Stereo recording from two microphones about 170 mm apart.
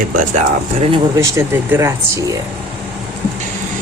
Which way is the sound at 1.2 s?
15° right (ahead or behind).